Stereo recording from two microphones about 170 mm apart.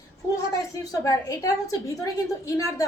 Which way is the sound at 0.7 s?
20° left (ahead or behind).